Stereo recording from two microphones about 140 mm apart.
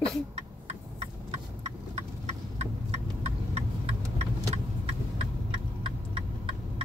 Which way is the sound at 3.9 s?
50° right (ahead or behind).